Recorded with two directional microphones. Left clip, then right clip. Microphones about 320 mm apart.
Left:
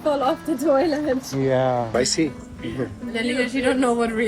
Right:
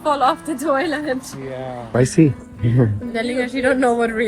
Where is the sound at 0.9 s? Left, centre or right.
Centre.